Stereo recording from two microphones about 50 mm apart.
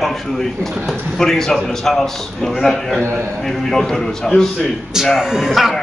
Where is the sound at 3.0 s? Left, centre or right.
Right.